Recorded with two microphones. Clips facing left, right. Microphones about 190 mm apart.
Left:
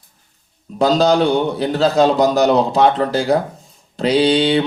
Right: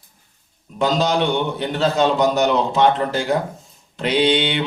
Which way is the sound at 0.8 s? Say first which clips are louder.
Left 5 dB; 35° left (ahead or behind).